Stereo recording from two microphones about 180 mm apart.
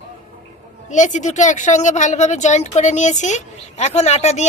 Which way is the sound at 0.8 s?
40° left (ahead or behind).